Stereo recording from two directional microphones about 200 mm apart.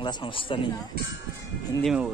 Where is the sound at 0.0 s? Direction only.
25° left (ahead or behind).